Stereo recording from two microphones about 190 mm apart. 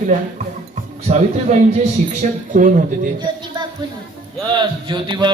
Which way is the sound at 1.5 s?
35° right (ahead or behind).